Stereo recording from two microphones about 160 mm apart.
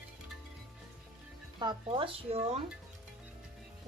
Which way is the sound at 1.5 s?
30° right (ahead or behind).